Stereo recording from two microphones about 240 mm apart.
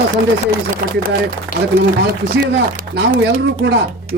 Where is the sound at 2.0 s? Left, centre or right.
Right.